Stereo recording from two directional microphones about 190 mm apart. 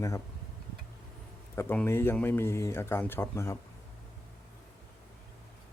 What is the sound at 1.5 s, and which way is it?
Speech, 10° left (ahead or behind).